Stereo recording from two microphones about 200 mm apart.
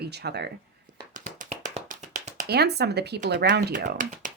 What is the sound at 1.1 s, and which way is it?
Tap, 40° right (ahead or behind).